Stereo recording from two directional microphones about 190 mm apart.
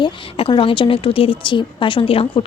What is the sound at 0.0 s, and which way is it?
A woman's voice, 25° left (ahead or behind).